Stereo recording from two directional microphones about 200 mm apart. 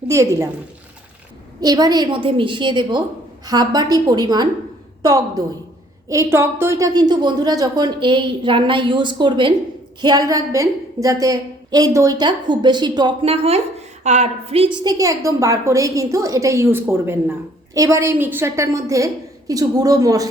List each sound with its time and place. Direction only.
0.1 s a woman's voice: 15° right (ahead or behind)
1.6 s a woman's voice: 20° right (ahead or behind)